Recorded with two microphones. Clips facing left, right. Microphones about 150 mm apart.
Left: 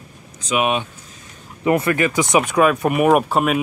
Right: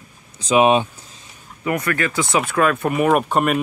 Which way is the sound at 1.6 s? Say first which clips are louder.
Left 4 dB; 25° left (ahead or behind).